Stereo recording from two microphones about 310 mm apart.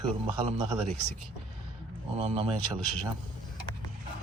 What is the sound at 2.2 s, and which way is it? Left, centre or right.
Speech, centre.